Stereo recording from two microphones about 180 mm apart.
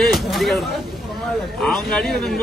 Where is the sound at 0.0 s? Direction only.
Centre (ahead or behind).